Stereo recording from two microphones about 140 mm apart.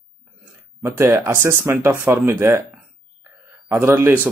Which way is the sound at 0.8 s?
20° right (ahead or behind).